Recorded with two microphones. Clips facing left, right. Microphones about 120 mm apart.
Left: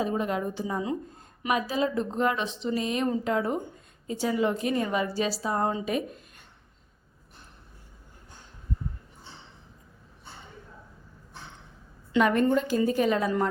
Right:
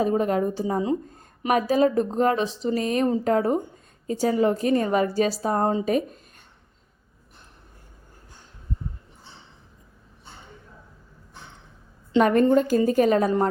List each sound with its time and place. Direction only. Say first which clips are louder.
0.0 s speech: right 6 dB; 45° right (ahead or behind)
1.5 s a woman's voice: right 7 dB; 45° right (ahead or behind)
12.2 s a woman's voice: right 5 dB; 40° right (ahead or behind)